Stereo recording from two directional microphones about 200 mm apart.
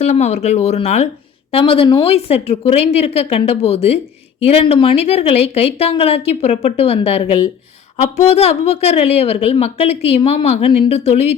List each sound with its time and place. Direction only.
0.0 s a woman's voice: 35° left (ahead or behind)